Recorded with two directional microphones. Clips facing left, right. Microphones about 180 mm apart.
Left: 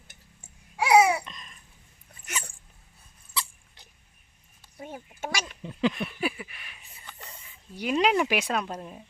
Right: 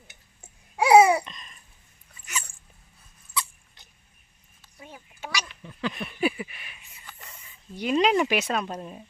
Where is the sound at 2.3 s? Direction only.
60° left (ahead or behind).